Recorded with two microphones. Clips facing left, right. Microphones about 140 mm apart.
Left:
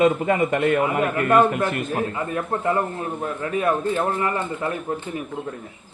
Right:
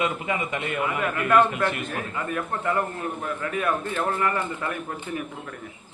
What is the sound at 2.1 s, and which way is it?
A man's voice, 30° left (ahead or behind).